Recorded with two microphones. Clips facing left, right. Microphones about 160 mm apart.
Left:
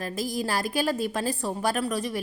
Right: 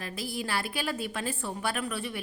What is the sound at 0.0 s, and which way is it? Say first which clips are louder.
A woman's voice: left 6 dB; 40° left (ahead or behind).